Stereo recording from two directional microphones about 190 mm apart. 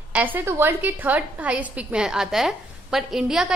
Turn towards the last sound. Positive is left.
turn(degrees=0)  # may be behind; listen again after turning